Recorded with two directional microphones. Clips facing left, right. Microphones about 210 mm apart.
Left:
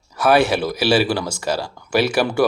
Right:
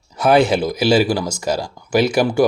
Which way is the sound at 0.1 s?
15° right (ahead or behind).